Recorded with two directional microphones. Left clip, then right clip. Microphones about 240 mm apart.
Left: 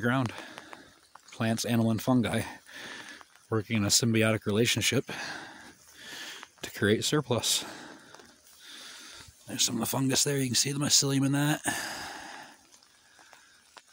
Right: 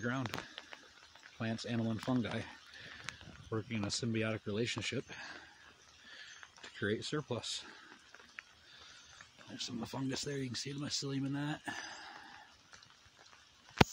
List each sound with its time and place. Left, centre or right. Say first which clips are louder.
0.0 s speech: left 10 dB; left
1.4 s speech: left 10 dB; left
9.6 s speech: left 13 dB; left